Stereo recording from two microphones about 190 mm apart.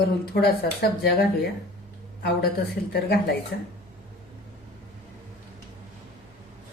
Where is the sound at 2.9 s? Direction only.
55° left (ahead or behind).